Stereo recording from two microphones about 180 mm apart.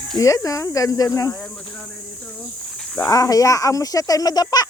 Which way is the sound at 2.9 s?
15° left (ahead or behind).